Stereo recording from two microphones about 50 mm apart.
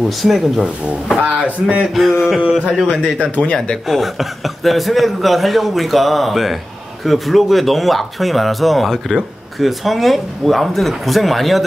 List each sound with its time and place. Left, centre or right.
0.2 s speech: centre
1.2 s speech: right
2.0 s speech: centre
2.9 s speech: left
3.8 s speech: centre